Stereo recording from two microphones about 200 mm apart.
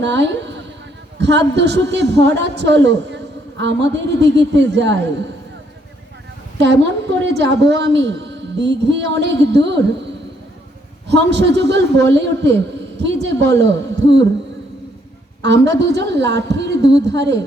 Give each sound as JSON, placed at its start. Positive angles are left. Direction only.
{"t": 0.0, "sound": "a woman's voice", "side_deg": -60}
{"t": 6.6, "sound": "a woman's voice", "side_deg": -60}
{"t": 11.1, "sound": "a woman's voice", "side_deg": -60}
{"t": 15.4, "sound": "a woman's voice", "side_deg": -60}